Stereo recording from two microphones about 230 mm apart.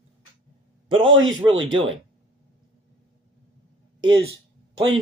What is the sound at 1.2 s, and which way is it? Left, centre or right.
Speech, centre.